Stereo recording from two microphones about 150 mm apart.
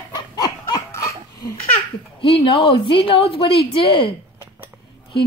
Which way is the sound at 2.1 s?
35° left (ahead or behind).